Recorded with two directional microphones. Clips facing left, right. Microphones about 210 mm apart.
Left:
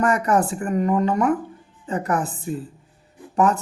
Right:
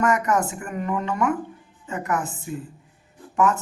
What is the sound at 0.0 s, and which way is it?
Speech, 35° left (ahead or behind).